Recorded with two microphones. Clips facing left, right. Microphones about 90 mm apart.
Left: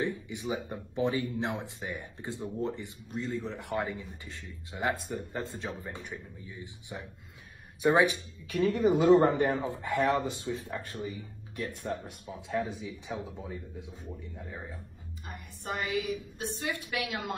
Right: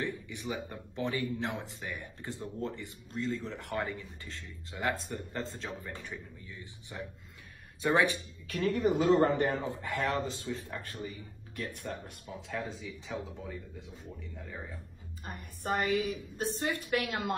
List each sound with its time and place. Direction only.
0.0 s speech: 15° left (ahead or behind)
15.2 s a woman's voice: 45° right (ahead or behind)